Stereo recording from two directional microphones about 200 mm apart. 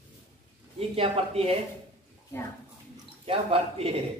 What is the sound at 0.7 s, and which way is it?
Speech, 30° right (ahead or behind).